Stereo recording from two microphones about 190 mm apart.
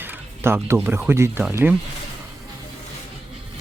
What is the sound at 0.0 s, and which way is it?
Speech, 10° right (ahead or behind).